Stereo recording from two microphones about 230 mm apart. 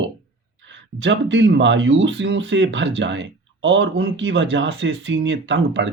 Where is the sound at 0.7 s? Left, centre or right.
Right.